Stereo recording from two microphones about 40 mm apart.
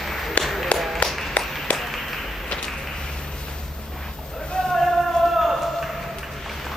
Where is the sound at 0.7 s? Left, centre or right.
Left.